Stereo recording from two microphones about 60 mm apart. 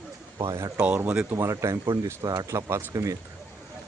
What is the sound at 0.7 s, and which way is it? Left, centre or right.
Speech, right.